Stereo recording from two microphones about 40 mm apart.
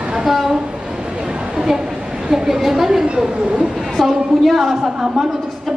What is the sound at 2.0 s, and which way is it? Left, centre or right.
A man's voice, centre.